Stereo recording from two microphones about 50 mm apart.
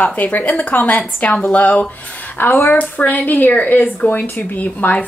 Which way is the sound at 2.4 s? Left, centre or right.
Left.